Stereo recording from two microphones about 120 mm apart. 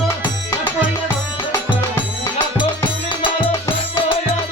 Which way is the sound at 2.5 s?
45° left (ahead or behind).